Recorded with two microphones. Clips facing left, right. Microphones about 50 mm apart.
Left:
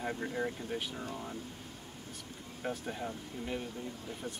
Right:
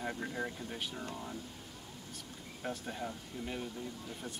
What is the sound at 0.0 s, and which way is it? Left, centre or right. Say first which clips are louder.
Speech: left 3 dB; centre.